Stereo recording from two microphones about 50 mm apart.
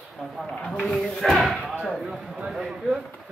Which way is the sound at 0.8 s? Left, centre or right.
Centre.